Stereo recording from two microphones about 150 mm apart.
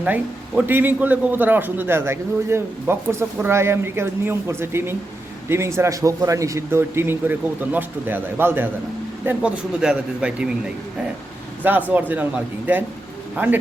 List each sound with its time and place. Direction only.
0.0 s a man's voice: 10° right (ahead or behind)
11.6 s a man's voice: 10° right (ahead or behind)